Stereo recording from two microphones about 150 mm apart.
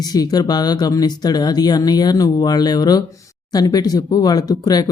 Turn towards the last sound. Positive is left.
turn(degrees=25)  # may be behind; listen again after turning